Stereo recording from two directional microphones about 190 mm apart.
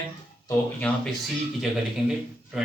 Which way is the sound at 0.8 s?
5° left (ahead or behind).